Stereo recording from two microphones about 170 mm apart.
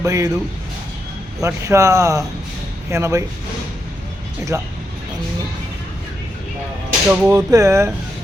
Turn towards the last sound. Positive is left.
turn(degrees=-15)  # may be behind; listen again after turning